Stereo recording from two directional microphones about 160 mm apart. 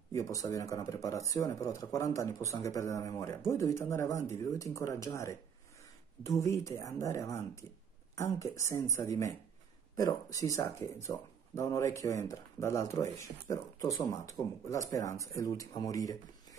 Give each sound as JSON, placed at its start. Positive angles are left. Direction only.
{"t": 0.1, "sound": "speech", "side_deg": 20}